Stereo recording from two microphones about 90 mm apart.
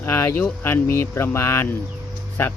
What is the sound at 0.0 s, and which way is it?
Speech, 25° left (ahead or behind).